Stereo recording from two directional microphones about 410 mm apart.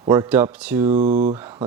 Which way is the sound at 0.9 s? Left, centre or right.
Centre.